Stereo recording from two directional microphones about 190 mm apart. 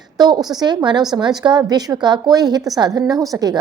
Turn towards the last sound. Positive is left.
turn(degrees=-20)  # may be behind; listen again after turning